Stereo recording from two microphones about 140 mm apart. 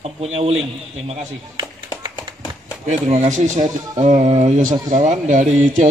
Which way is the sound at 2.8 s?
60° right (ahead or behind).